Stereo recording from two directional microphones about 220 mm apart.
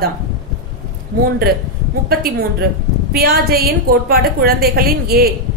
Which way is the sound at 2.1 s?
45° right (ahead or behind).